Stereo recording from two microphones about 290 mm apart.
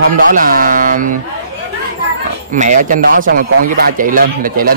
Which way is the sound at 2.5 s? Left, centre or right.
Right.